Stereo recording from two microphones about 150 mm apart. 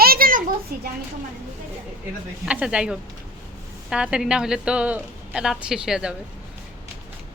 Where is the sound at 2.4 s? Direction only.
5° right (ahead or behind).